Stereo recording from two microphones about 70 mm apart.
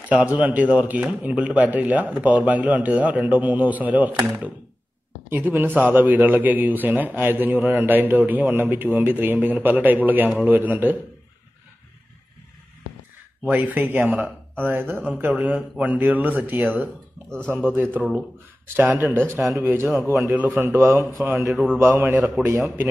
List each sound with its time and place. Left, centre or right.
0.1 s a man's voice: right
5.3 s a man's voice: right
13.5 s a man's voice: right
18.8 s a man's voice: right
21.7 s a man's voice: right